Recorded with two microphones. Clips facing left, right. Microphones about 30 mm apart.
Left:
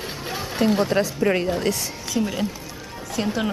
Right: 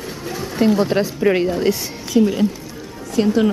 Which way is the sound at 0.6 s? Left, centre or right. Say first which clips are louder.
Right 4 dB; centre.